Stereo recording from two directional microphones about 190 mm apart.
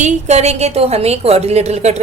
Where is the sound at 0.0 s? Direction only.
35° right (ahead or behind).